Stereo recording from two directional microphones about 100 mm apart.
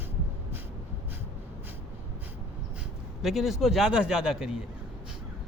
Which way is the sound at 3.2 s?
Centre (ahead or behind).